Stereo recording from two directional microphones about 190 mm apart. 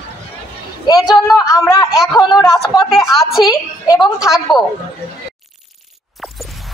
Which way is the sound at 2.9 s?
Centre (ahead or behind).